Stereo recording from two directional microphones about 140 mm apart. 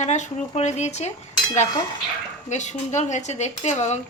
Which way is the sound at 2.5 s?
55° left (ahead or behind).